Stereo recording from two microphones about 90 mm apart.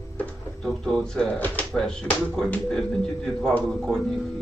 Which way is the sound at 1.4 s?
15° left (ahead or behind).